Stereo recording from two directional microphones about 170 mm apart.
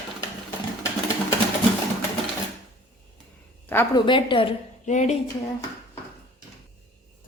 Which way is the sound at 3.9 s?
30° left (ahead or behind).